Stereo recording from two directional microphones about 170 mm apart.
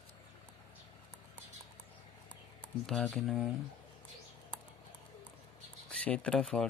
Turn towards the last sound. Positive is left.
turn(degrees=5)  # may be behind; listen again after turning